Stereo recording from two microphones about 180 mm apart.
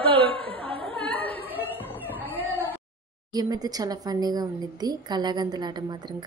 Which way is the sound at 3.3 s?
20° right (ahead or behind).